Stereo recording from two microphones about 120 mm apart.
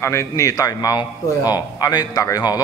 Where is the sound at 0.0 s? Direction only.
25° left (ahead or behind).